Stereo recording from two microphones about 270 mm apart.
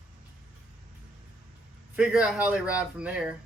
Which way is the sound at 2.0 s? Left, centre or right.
Centre.